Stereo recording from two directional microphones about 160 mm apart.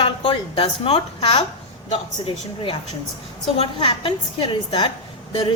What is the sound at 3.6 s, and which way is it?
A woman's voice, 35° left (ahead or behind).